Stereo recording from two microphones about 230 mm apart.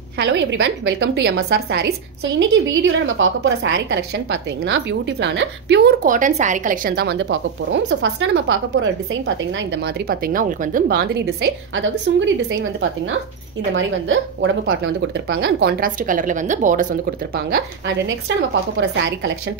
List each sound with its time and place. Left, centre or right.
0.2 s a woman's voice: right
13.7 s a woman's voice: right
17.8 s a woman's voice: right